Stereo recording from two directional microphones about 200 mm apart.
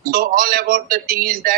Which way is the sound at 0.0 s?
45° right (ahead or behind).